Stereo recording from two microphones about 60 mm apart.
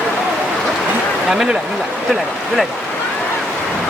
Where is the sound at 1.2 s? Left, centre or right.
Centre.